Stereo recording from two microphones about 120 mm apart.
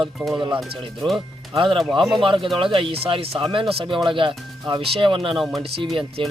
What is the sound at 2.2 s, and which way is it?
Speech, 45° right (ahead or behind).